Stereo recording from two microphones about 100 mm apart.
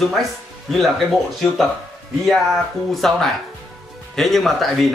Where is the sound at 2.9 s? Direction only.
Centre (ahead or behind).